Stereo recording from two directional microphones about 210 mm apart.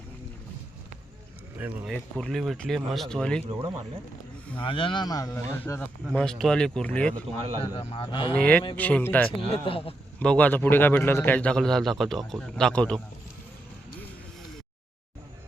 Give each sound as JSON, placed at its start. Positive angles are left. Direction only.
{"t": 1.5, "sound": "speech", "side_deg": -10}
{"t": 1.9, "sound": "a man's voice", "side_deg": 5}
{"t": 4.5, "sound": "speech", "side_deg": 25}
{"t": 6.1, "sound": "a man's voice", "side_deg": 0}
{"t": 7.6, "sound": "a man's voice", "side_deg": 30}
{"t": 8.3, "sound": "speech", "side_deg": 5}
{"t": 9.5, "sound": "a man's voice", "side_deg": 25}
{"t": 10.2, "sound": "a man's voice", "side_deg": 5}